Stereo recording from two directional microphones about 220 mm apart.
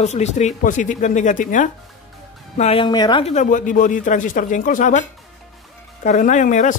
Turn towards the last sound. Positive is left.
turn(degrees=35)  # may be behind; listen again after turning